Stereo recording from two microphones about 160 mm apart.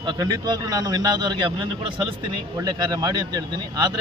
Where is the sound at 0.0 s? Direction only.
25° right (ahead or behind).